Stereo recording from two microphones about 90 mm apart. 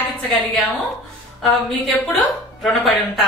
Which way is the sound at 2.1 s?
Centre (ahead or behind).